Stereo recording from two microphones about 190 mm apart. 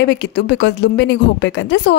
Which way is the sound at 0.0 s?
65° left (ahead or behind).